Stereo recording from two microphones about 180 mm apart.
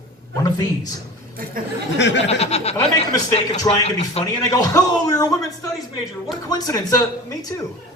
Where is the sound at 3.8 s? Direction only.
35° left (ahead or behind).